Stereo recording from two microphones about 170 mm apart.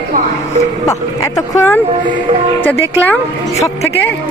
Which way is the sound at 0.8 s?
20° left (ahead or behind).